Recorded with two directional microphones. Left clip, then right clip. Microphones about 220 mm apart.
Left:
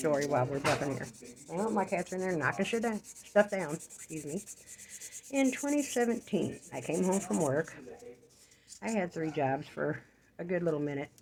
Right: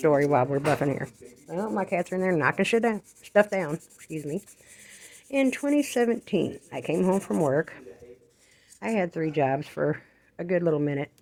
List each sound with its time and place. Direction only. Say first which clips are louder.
0.0 s rub: right 8 dB; 40° right (ahead or behind)
1.5 s sanding: right 4 dB; 45° right (ahead or behind)
4.8 s rub: right 2 dB; 40° right (ahead or behind)